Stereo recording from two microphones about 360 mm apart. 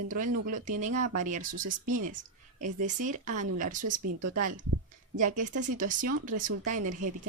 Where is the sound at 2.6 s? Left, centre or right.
Right.